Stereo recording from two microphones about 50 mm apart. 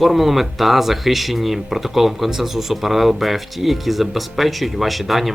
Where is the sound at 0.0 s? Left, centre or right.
Centre.